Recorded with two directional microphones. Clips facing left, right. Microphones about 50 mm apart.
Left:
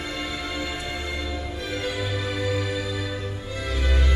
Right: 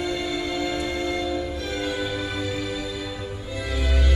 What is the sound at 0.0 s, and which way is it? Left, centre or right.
Music, centre.